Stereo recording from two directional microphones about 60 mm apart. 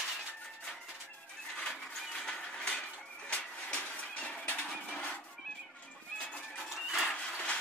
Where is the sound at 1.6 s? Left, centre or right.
Centre.